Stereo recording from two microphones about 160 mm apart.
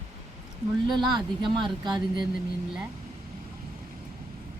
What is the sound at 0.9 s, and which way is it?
Speech, 25° right (ahead or behind).